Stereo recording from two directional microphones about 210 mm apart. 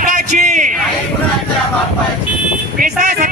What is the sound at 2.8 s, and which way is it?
Speech, 40° right (ahead or behind).